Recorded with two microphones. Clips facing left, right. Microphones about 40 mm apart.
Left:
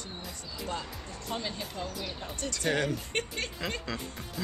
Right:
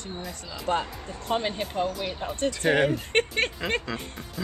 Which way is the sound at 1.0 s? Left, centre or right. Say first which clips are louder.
Right 8 dB; right.